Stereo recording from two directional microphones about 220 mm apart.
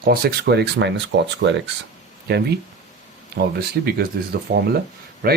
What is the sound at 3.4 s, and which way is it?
Speech, 45° right (ahead or behind).